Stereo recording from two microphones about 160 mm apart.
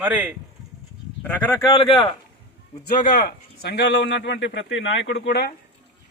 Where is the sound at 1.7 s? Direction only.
35° left (ahead or behind).